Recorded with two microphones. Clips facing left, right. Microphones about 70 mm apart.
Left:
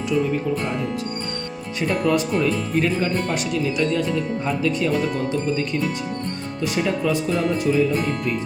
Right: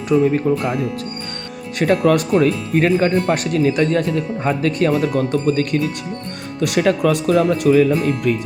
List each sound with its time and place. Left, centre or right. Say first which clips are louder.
0.1 s speech: right 7 dB; right
1.8 s speech: right 6 dB; right
3.0 s speech: right 6 dB; right
6.6 s speech: right 7 dB; right